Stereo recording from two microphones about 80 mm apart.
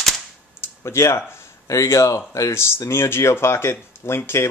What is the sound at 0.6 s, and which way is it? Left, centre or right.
Speech, left.